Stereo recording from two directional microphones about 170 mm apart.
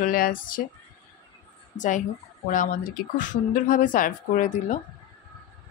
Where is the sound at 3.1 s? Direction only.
50° left (ahead or behind).